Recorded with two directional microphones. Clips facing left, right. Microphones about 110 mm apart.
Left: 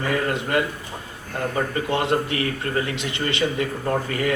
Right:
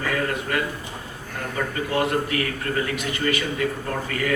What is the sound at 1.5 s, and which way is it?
A man's voice, 30° left (ahead or behind).